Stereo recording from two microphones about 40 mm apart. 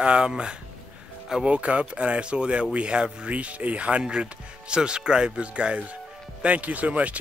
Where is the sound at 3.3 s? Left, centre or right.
Right.